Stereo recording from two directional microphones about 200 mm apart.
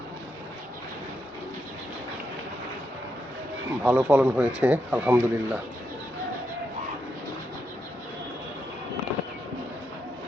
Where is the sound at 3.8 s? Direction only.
5° right (ahead or behind).